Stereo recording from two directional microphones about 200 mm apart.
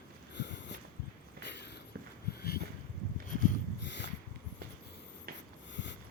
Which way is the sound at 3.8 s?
60° left (ahead or behind).